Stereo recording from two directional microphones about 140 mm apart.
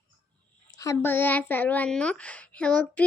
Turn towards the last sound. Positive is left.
turn(degrees=10)  # may be behind; listen again after turning